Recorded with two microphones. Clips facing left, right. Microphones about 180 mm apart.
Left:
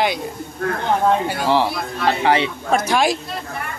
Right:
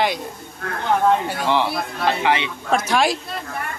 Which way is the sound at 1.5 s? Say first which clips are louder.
Left 2 dB; 35° left (ahead or behind).